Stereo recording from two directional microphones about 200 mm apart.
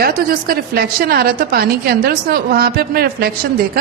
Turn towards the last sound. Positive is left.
turn(degrees=-50)  # may be behind; listen again after turning